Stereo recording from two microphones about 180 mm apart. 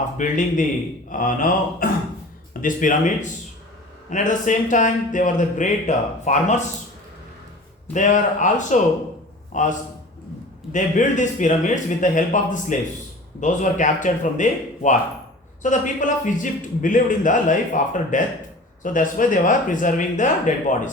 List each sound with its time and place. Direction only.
0.2 s a man's voice: 45° left (ahead or behind)
7.9 s a man's voice: 45° left (ahead or behind)